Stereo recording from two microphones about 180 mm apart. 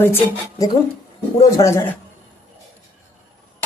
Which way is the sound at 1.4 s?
20° left (ahead or behind).